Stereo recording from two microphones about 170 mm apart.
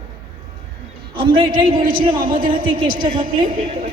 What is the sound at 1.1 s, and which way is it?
Speech, 30° right (ahead or behind).